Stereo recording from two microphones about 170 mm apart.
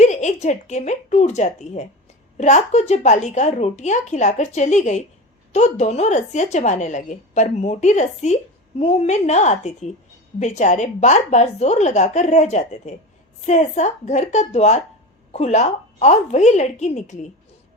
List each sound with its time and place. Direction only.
0.0 s a woman's voice: 45° left (ahead or behind)